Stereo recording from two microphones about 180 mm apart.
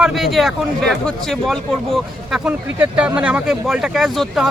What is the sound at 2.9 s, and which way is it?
Speech, 5° right (ahead or behind).